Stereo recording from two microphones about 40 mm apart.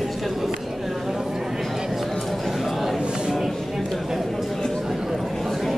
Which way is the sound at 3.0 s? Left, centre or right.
Centre.